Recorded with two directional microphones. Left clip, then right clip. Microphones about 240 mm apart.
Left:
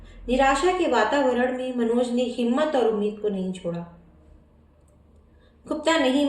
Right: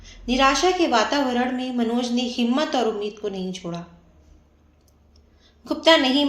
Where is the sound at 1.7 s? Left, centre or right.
Right.